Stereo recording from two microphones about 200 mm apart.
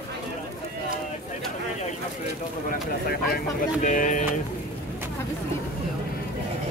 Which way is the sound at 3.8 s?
40° left (ahead or behind).